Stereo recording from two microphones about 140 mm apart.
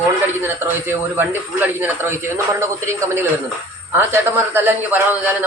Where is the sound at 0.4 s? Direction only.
15° right (ahead or behind).